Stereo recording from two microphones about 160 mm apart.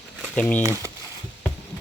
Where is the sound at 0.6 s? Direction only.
15° right (ahead or behind).